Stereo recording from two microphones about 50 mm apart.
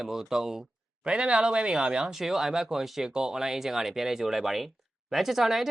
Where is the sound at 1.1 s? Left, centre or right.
Right.